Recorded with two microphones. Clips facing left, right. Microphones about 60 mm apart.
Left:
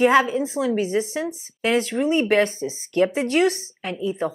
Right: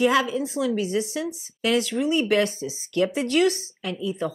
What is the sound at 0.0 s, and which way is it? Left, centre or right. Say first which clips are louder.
A woman's voice: left 4 dB; left.